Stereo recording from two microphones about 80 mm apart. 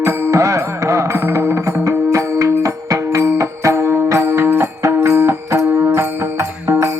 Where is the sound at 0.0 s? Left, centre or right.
Right.